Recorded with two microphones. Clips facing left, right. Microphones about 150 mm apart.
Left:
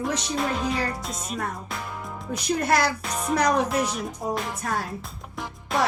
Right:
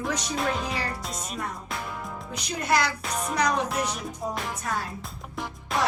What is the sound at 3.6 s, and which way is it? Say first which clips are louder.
Speech: left 3 dB; centre (ahead or behind).